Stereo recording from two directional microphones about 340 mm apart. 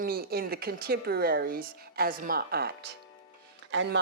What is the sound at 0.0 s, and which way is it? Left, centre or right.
A woman's voice, right.